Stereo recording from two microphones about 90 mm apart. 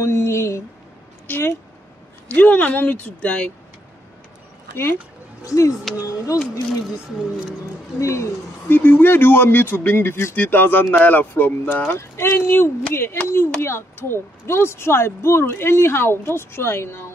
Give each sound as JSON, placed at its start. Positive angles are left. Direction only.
{"t": 0.0, "sound": "speech", "side_deg": 35}
{"t": 1.2, "sound": "a sound", "side_deg": 20}
{"t": 2.3, "sound": "speech", "side_deg": 20}
{"t": 5.4, "sound": "speech", "side_deg": 40}
{"t": 8.0, "sound": "speech", "side_deg": 35}
{"t": 8.6, "sound": "speech", "side_deg": 20}